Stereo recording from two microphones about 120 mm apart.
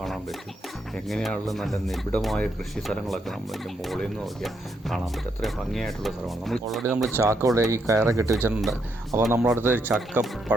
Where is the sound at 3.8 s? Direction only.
Centre (ahead or behind).